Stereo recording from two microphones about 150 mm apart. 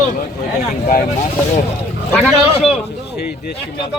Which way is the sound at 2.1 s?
Centre (ahead or behind).